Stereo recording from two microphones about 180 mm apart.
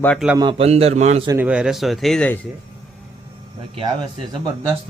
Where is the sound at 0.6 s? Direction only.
35° right (ahead or behind).